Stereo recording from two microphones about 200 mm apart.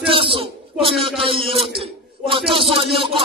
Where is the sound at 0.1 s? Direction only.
25° right (ahead or behind).